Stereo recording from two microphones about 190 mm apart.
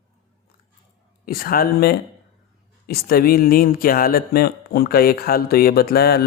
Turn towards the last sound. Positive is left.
turn(degrees=55)  # may be behind; listen again after turning